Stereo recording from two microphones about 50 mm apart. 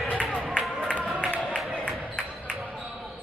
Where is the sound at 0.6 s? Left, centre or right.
Left.